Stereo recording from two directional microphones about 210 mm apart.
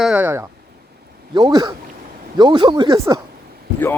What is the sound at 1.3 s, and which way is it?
Speech, 20° right (ahead or behind).